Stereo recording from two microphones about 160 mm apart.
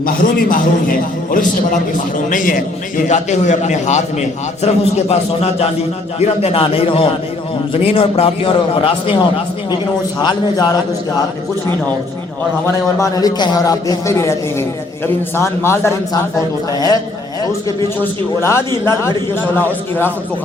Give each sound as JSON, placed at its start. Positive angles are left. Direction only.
{"t": 0.0, "sound": "a man's voice", "side_deg": 60}
{"t": 3.1, "sound": "a man's voice", "side_deg": 45}
{"t": 12.6, "sound": "a man's voice", "side_deg": 20}
{"t": 18.0, "sound": "a man's voice", "side_deg": 15}